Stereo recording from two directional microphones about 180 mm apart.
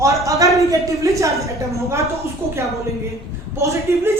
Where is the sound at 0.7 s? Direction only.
15° right (ahead or behind).